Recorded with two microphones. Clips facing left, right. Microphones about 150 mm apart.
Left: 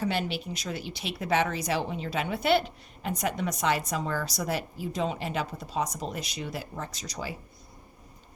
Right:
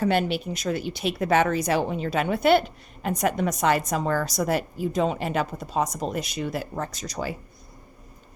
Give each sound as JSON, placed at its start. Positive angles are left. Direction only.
{"t": 0.0, "sound": "speech", "side_deg": -55}